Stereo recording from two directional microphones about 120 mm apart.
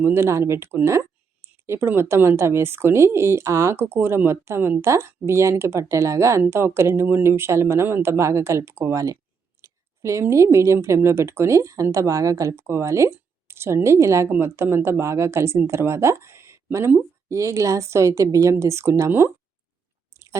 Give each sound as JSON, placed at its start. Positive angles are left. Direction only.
{"t": 0.0, "sound": "speech", "side_deg": -20}